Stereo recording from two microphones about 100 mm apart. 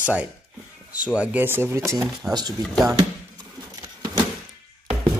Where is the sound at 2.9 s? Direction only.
35° right (ahead or behind).